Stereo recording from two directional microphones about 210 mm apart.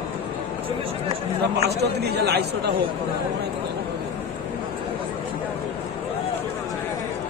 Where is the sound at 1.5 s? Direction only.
50° right (ahead or behind).